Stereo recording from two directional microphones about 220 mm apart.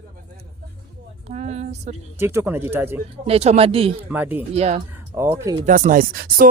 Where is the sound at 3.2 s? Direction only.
30° right (ahead or behind).